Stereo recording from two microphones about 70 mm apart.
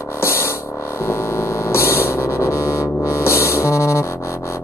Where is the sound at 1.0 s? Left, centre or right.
Left.